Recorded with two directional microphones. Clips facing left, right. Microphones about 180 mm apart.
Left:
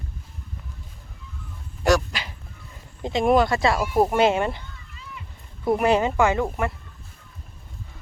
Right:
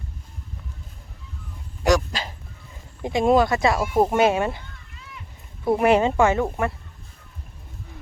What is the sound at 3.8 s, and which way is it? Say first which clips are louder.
Speech: even; centre (ahead or behind).